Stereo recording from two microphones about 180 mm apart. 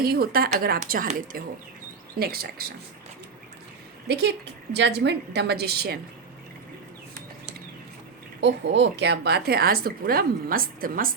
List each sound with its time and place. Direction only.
0.0 s a woman's voice: 55° right (ahead or behind)
4.7 s a woman's voice: 70° right (ahead or behind)
8.4 s a woman's voice: 80° right; by 11.1 s 50° right (ahead or behind)